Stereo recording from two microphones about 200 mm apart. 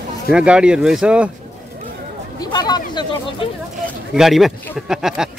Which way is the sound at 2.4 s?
20° left (ahead or behind).